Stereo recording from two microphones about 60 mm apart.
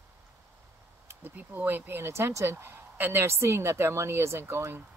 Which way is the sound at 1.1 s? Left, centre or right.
Right.